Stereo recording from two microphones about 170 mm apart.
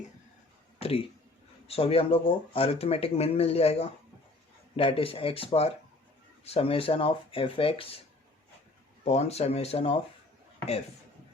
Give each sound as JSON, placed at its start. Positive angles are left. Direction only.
{"t": 0.8, "sound": "speech", "side_deg": 35}
{"t": 9.0, "sound": "speech", "side_deg": 40}